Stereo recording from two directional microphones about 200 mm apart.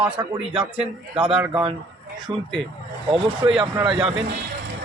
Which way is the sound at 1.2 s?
5° right (ahead or behind).